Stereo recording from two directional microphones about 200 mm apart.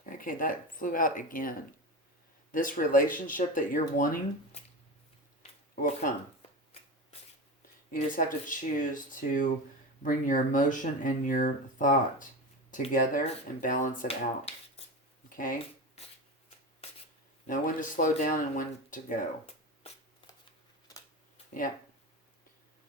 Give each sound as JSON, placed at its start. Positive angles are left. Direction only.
{"t": 0.0, "sound": "speech", "side_deg": 45}
{"t": 5.7, "sound": "speech", "side_deg": 40}
{"t": 7.9, "sound": "speech", "side_deg": 40}
{"t": 17.4, "sound": "speech", "side_deg": 40}